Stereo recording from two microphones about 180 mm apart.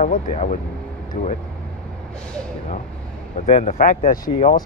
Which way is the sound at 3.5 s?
40° left (ahead or behind).